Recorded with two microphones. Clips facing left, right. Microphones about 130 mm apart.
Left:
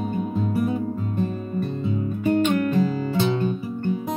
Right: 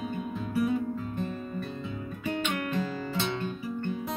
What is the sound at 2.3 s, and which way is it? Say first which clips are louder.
Music: left 11 dB; 40° left (ahead or behind).